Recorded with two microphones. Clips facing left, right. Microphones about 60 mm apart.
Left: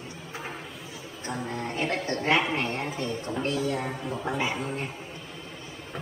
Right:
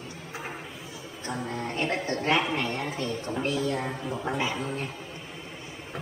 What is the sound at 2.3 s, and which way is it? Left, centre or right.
A man's voice, centre.